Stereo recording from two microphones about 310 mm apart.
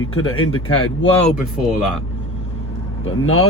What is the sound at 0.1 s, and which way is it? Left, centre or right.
Speech, left.